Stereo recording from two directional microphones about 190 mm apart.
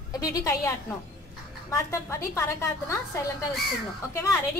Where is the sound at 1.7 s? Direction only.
15° left (ahead or behind).